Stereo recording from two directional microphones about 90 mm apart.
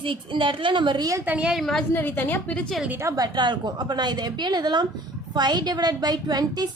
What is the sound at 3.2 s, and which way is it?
A woman's voice, 55° right (ahead or behind).